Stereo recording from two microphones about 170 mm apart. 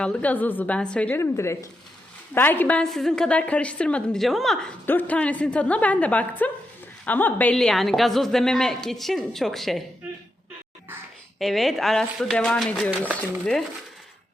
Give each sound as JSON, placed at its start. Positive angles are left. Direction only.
{"t": 0.0, "sound": "a woman's voice", "side_deg": 5}
{"t": 11.3, "sound": "a woman's voice", "side_deg": 0}